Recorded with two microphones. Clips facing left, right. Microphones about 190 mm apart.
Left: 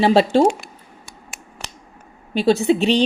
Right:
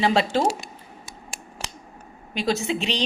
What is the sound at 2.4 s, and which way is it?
Speech, 35° left (ahead or behind).